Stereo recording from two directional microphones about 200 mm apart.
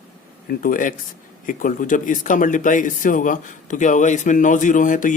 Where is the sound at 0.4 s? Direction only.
45° left (ahead or behind).